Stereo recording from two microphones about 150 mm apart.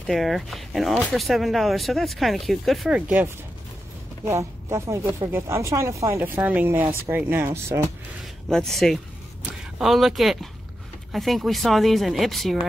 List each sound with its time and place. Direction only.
0.0 s speech: centre (ahead or behind)
4.3 s speech: 20° right (ahead or behind)
8.5 s speech: 5° left (ahead or behind)